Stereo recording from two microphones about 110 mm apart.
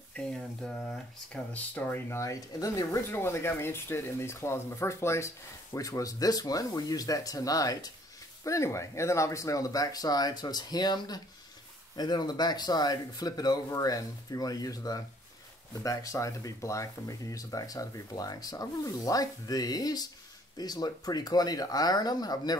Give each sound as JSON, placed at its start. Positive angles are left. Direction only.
{"t": 0.1, "sound": "speech", "side_deg": 5}